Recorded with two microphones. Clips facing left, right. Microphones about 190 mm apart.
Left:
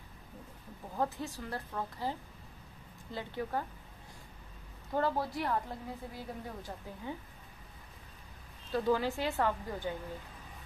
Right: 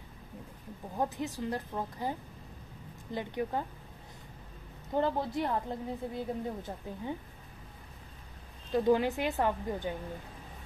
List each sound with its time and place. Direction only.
0.9 s speech: 15° right (ahead or behind)
4.9 s a woman's voice: 20° right (ahead or behind)
8.7 s a woman's voice: 20° right (ahead or behind)